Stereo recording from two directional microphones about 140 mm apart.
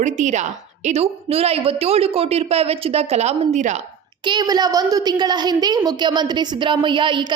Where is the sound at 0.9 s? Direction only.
50° right (ahead or behind).